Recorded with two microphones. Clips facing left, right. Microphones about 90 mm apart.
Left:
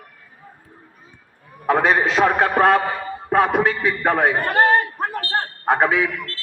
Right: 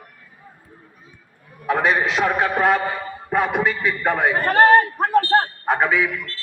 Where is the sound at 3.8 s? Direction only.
45° left (ahead or behind).